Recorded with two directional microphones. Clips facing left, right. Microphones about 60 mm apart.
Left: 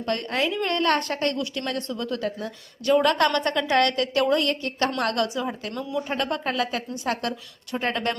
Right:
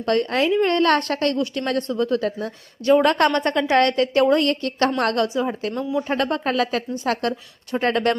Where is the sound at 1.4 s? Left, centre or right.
Right.